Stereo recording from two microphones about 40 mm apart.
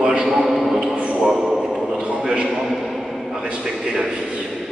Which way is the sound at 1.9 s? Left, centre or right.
Right.